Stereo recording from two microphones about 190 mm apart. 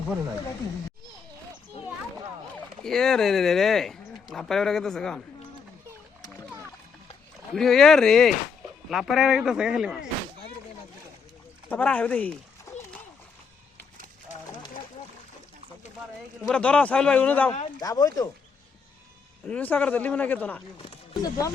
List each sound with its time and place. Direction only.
2.8 s speech: 5° left (ahead or behind)
7.5 s speech: centre (ahead or behind)
11.7 s speech: 10° left (ahead or behind)
12.7 s splash: 15° left (ahead or behind)
16.4 s speech: 5° left (ahead or behind)
17.7 s speech: 20° left (ahead or behind)
19.5 s speech: 10° left (ahead or behind)
20.7 s speech: 25° left (ahead or behind)